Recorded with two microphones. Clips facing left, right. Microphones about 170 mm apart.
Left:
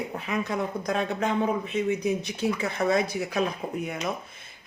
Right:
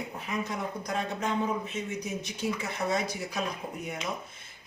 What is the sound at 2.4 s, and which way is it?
Speech, 60° left (ahead or behind).